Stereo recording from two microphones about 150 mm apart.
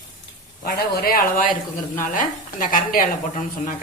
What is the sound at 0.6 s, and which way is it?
A woman's voice, 80° left.